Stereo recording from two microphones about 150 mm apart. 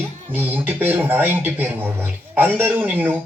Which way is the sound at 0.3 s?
15° right (ahead or behind).